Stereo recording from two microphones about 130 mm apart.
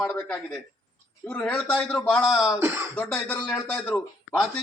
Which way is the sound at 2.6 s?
20° right (ahead or behind).